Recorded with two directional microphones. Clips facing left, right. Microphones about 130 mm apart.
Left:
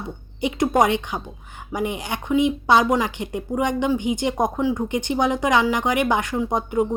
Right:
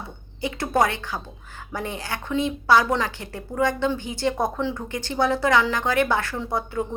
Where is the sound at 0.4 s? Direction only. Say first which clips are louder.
Left 4 dB; 15° left (ahead or behind).